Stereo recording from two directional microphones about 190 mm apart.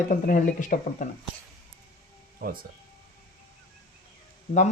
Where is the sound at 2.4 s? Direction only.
50° right (ahead or behind).